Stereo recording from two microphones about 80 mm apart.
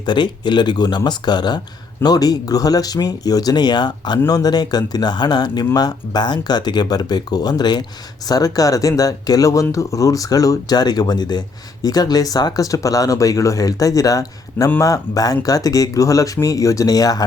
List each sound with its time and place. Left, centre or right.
0.0 s speech: left
4.3 s speech: left